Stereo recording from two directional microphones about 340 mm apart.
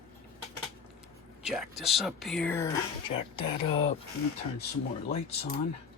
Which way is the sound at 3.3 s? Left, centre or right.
Centre.